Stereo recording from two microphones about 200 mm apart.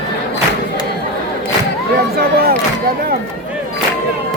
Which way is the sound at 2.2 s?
50° right (ahead or behind).